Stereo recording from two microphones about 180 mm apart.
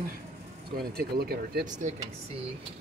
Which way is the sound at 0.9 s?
60° right (ahead or behind).